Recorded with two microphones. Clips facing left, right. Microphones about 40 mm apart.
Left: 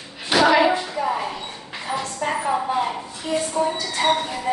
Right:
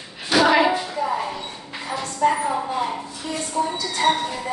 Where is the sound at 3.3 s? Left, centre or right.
Left.